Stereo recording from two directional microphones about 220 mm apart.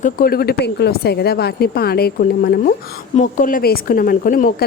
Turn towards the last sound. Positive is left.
turn(degrees=45)  # may be behind; listen again after turning